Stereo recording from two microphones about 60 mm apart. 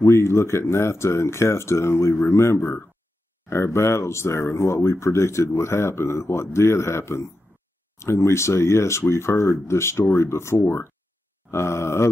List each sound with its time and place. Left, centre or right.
0.0 s speech: left